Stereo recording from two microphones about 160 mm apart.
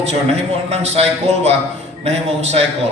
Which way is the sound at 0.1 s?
40° right (ahead or behind).